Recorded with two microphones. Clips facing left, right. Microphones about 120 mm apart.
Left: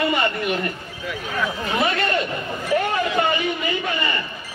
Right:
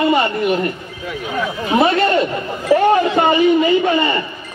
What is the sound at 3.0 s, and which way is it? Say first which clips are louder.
A man's voice: right 8 dB; 35° right (ahead or behind).